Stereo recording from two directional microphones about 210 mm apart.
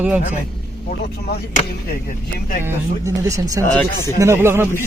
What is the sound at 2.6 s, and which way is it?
Speech, 10° right (ahead or behind).